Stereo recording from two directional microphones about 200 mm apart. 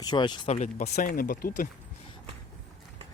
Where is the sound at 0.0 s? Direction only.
20° left (ahead or behind).